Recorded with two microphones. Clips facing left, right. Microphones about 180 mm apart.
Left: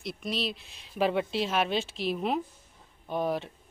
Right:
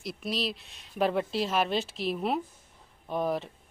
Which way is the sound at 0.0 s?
Centre (ahead or behind).